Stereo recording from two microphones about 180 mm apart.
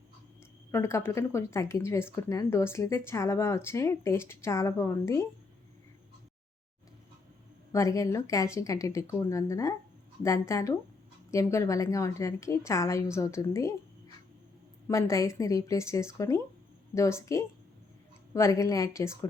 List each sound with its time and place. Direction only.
0.7 s speech: 15° left (ahead or behind)
7.7 s speech: 15° left (ahead or behind)
14.8 s speech: 15° left (ahead or behind)